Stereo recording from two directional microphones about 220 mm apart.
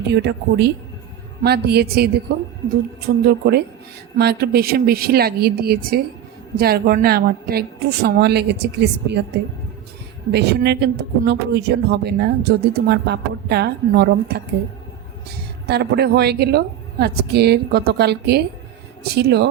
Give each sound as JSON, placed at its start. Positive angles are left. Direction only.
{"t": 0.1, "sound": "speech", "side_deg": -50}
{"t": 15.6, "sound": "speech", "side_deg": -50}